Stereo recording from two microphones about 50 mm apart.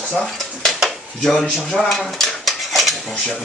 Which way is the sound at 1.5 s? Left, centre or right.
Centre.